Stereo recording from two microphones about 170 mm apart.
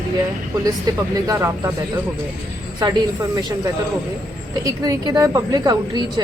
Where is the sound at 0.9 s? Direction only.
20° right (ahead or behind).